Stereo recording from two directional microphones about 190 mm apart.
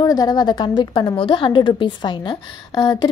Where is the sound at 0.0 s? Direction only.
20° left (ahead or behind).